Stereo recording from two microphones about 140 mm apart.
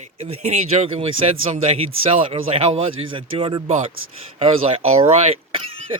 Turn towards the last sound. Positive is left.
turn(degrees=-40)  # may be behind; listen again after turning